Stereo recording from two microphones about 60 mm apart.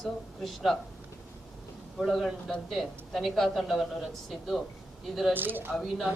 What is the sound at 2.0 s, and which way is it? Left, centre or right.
A man's voice, centre.